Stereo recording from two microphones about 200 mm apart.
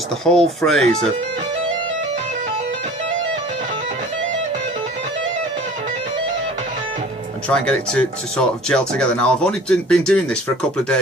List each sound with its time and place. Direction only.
0.3 s speech: 5° left (ahead or behind)
7.4 s speech: 5° left (ahead or behind)